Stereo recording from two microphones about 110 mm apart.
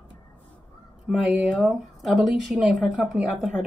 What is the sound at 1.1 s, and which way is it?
Speech, 5° right (ahead or behind).